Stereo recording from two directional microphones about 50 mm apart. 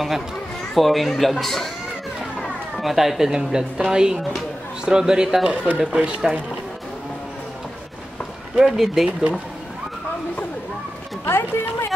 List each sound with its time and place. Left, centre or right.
0.7 s a man's voice: centre
8.5 s a man's voice: centre
11.2 s speech: left